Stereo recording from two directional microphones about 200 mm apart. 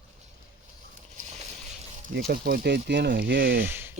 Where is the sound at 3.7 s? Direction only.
10° right (ahead or behind).